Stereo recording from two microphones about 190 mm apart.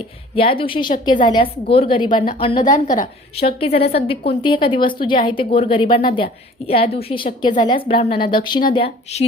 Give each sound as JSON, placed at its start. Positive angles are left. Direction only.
{"t": 0.3, "sound": "a woman's voice", "side_deg": 30}
{"t": 2.6, "sound": "a woman's voice", "side_deg": 40}
{"t": 3.3, "sound": "a woman's voice", "side_deg": 30}